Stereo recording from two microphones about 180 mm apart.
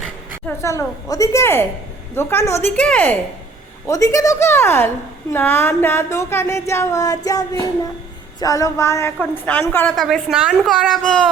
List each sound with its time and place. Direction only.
0.4 s speech: 15° left (ahead or behind)
3.8 s speech: 20° left (ahead or behind)
7.3 s a sound: 20° left (ahead or behind)
8.4 s a woman's voice: 20° left (ahead or behind); by 11.3 s centre (ahead or behind)